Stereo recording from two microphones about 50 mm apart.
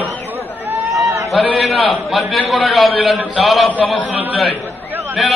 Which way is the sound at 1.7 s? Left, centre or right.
Centre.